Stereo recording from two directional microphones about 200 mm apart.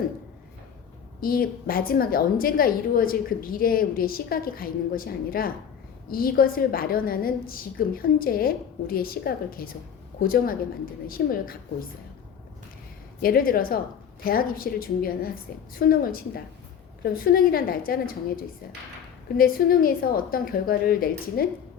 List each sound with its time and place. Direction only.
1.2 s a woman's voice: 45° left (ahead or behind)
13.1 s a woman's voice: 50° left (ahead or behind)
19.4 s a woman's voice: 45° left (ahead or behind)